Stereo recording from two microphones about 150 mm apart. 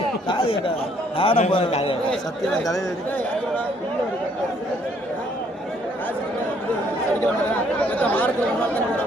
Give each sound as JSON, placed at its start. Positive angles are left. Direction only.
{"t": 0.3, "sound": "a man's voice", "side_deg": 35}
{"t": 7.8, "sound": "speech", "side_deg": 10}